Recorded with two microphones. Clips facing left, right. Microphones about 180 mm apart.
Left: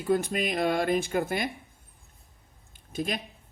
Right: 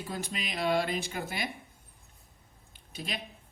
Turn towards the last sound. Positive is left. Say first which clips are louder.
# left 9 dB
turn(degrees=50)  # may be behind; listen again after turning